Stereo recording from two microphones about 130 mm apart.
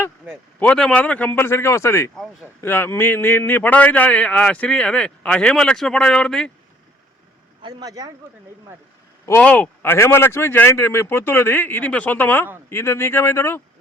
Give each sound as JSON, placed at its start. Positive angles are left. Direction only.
{"t": 0.6, "sound": "a man's voice", "side_deg": 5}
{"t": 7.6, "sound": "speech", "side_deg": -30}
{"t": 9.4, "sound": "a man's voice", "side_deg": 10}